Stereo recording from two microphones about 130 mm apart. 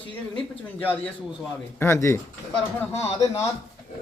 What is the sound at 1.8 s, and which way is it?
Speech, 20° left (ahead or behind).